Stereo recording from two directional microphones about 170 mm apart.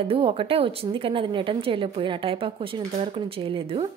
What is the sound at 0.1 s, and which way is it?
A woman's voice, 35° right (ahead or behind).